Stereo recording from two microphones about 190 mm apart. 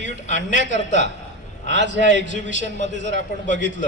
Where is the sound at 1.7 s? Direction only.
65° right (ahead or behind).